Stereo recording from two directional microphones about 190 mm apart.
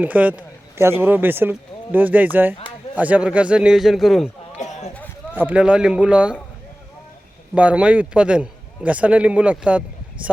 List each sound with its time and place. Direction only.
0.0 s a man's voice: 10° right (ahead or behind)
4.5 s a sound: 35° left (ahead or behind)
5.3 s a man's voice: 10° right (ahead or behind)
7.5 s speech: 5° right (ahead or behind)